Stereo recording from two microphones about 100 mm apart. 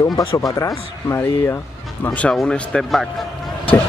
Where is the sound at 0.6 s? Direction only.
30° left (ahead or behind).